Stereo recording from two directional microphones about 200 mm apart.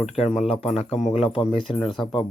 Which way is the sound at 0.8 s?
30° left (ahead or behind).